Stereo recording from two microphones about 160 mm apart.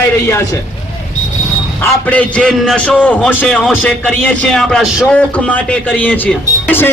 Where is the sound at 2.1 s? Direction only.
10° left (ahead or behind).